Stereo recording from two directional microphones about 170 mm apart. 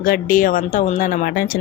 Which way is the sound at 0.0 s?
55° left (ahead or behind).